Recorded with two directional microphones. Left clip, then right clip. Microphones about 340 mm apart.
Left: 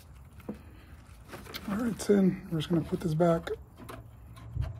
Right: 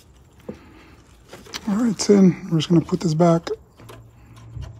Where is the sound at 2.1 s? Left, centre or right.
Right.